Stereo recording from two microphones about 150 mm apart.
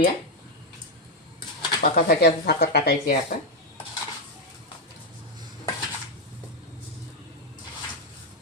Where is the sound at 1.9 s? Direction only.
90° left.